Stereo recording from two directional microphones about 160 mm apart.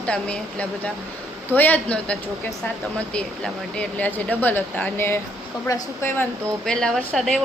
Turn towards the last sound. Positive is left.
turn(degrees=5)  # may be behind; listen again after turning